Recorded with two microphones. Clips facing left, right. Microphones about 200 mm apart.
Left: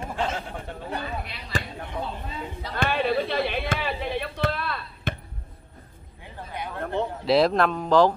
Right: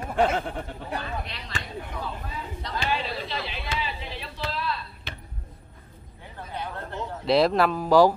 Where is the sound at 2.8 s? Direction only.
55° left (ahead or behind).